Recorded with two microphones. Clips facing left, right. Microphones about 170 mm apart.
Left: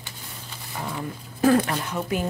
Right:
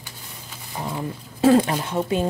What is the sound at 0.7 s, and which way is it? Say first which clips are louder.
Speech: right 3 dB; 20° right (ahead or behind).